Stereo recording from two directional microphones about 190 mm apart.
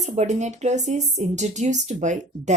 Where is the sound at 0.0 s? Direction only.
35° right (ahead or behind).